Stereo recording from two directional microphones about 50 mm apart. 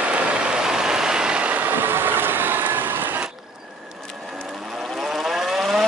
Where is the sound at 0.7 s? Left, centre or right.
Centre.